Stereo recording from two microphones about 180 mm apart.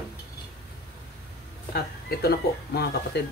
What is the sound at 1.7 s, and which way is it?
Speech, 60° left (ahead or behind).